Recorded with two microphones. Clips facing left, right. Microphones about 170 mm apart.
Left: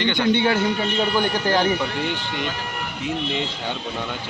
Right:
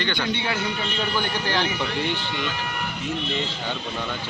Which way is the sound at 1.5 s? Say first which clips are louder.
Left 5 dB; 50° left (ahead or behind).